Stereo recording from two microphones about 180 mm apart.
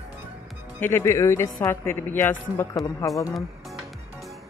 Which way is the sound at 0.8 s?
10° left (ahead or behind).